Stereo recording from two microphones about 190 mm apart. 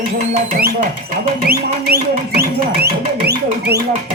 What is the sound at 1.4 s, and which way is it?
Music, 55° right (ahead or behind).